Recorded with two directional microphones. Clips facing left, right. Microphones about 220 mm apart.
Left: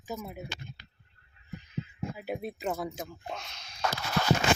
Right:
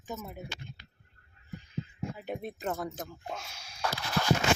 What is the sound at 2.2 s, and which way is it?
Speech, 10° left (ahead or behind).